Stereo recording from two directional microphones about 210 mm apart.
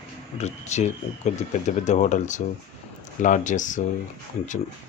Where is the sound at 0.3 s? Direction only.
35° left (ahead or behind).